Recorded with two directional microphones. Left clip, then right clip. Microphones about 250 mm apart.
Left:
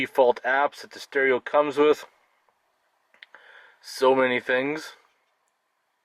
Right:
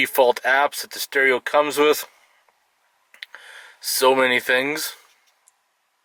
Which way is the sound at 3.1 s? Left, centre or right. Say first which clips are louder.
Right 9 dB; centre.